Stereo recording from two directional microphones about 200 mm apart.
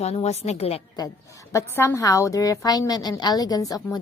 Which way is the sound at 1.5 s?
10° left (ahead or behind).